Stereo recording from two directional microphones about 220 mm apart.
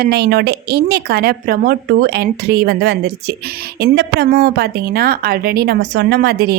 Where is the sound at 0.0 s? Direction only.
45° right (ahead or behind).